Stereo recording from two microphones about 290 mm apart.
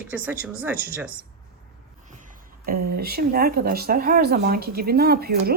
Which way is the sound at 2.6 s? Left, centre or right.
Right.